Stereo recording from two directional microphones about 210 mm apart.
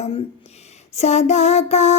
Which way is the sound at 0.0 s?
30° left (ahead or behind).